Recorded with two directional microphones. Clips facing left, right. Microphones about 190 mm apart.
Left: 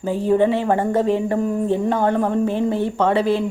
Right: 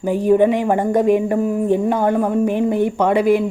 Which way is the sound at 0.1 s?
15° right (ahead or behind).